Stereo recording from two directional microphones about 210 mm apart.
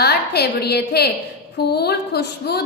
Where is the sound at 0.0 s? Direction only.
50° left (ahead or behind).